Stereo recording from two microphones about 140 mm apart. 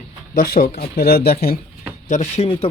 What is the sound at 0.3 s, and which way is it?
Speech, 85° left.